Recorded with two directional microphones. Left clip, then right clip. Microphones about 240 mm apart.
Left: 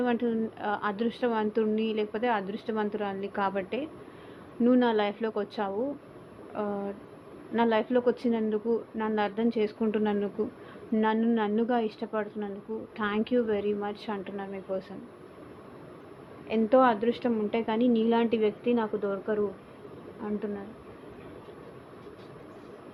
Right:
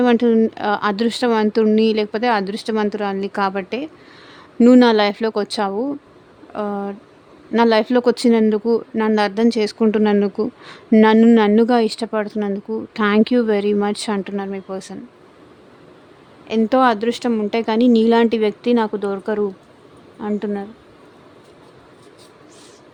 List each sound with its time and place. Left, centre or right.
0.0 s a woman's voice: right
16.5 s a woman's voice: right